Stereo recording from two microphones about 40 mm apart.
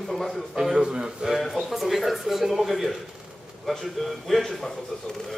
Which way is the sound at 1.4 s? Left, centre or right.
Centre.